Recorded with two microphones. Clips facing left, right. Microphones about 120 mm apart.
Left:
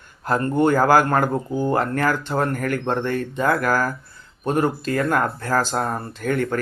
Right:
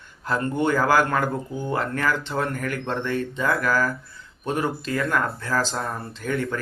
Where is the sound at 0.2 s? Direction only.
45° left (ahead or behind).